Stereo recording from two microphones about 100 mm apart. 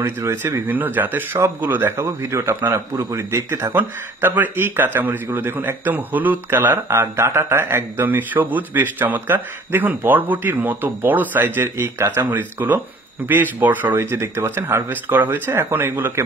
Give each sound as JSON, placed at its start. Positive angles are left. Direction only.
{"t": 0.0, "sound": "a man's voice", "side_deg": -25}